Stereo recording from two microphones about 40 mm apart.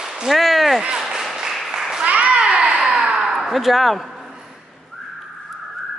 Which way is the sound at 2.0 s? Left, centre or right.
Right.